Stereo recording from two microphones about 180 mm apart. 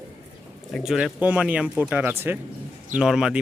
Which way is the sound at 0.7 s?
Centre (ahead or behind).